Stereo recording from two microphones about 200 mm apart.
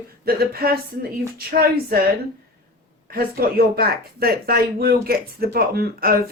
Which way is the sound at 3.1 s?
50° right (ahead or behind).